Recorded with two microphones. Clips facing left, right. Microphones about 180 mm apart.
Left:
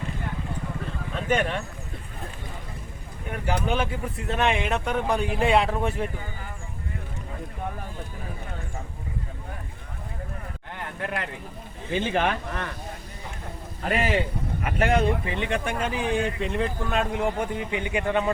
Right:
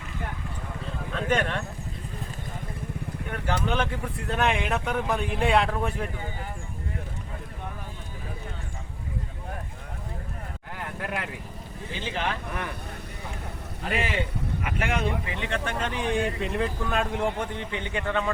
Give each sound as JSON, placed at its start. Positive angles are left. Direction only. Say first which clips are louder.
{"t": 1.1, "sound": "speech", "louder": "left 1 dB", "side_deg": 5}
{"t": 3.4, "sound": "speech", "louder": "left 1 dB", "side_deg": 10}
{"t": 10.8, "sound": "a sound", "louder": "left 1 dB", "side_deg": -5}
{"t": 11.9, "sound": "speech", "louder": "left 7 dB", "side_deg": 55}
{"t": 12.5, "sound": "speech", "louder": "left 1 dB", "side_deg": -10}
{"t": 13.8, "sound": "speech", "louder": "left 4 dB", "side_deg": 40}
{"t": 15.4, "sound": "speech", "louder": "left 3 dB", "side_deg": 15}